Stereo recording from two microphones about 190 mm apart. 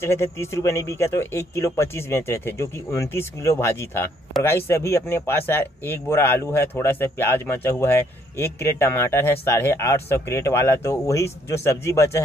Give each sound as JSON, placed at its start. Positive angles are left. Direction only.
{"t": 0.0, "sound": "speech", "side_deg": 15}